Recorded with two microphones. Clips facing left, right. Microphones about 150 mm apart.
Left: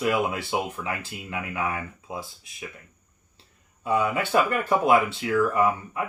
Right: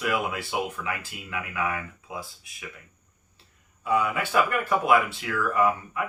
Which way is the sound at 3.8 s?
30° left (ahead or behind).